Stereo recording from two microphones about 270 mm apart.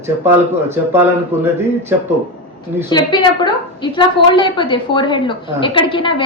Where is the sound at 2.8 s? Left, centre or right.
Centre.